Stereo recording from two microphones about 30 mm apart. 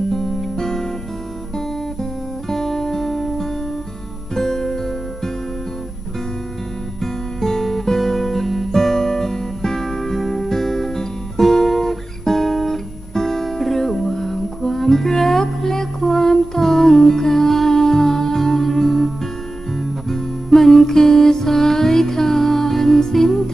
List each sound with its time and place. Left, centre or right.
0.1 s music: centre
2.5 s guitar: centre
4.4 s music: centre
7.0 s guitar: centre
17.7 s music: centre